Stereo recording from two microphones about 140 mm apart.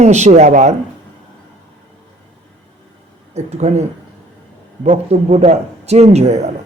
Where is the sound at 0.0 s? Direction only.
55° right (ahead or behind).